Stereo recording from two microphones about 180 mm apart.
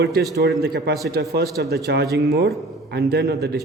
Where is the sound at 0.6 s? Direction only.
65° right (ahead or behind).